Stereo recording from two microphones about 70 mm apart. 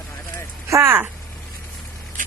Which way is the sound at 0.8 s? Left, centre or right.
Right.